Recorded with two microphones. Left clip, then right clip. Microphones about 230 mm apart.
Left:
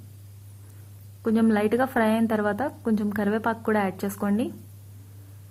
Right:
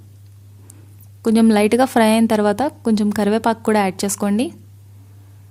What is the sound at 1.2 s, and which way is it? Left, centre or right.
A woman's voice, right.